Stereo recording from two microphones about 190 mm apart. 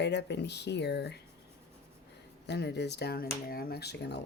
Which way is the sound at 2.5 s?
65° left (ahead or behind).